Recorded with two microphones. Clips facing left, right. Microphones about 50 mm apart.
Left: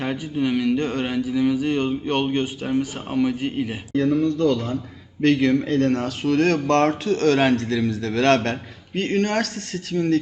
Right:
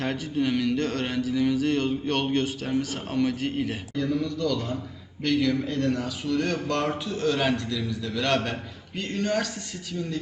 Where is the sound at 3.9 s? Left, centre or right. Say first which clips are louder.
Left 11 dB; left.